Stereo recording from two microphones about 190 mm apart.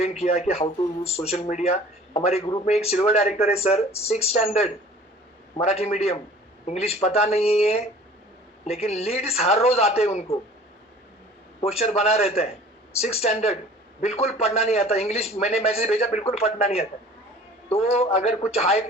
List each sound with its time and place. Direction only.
0.0 s a man's voice: 35° left (ahead or behind)
11.6 s a man's voice: 35° left (ahead or behind)